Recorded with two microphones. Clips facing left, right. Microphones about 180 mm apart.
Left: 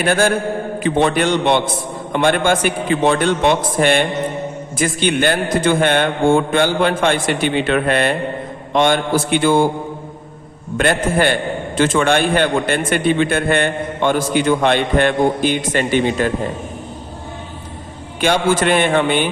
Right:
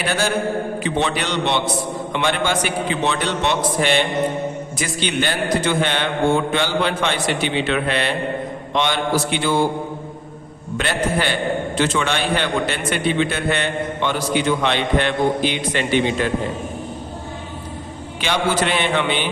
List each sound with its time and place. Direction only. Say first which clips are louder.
0.0 s a man's voice: left 5 dB; 50° left (ahead or behind)
10.8 s a man's voice: left 5 dB; 50° left (ahead or behind)
18.2 s a man's voice: left 5 dB; 50° left (ahead or behind)